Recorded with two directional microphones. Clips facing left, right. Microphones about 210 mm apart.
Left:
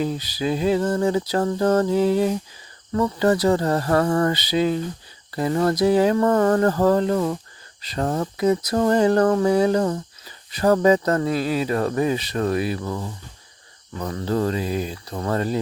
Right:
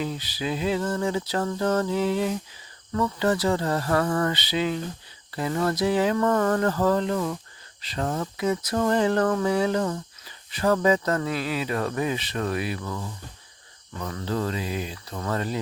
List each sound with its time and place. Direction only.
0.0 s speech: 40° left (ahead or behind)